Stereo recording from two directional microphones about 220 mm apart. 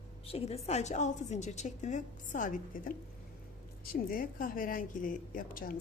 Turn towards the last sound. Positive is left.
turn(degrees=40)  # may be behind; listen again after turning